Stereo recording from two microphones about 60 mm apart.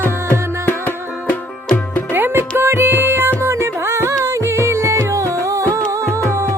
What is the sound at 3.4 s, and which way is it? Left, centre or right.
Music, right.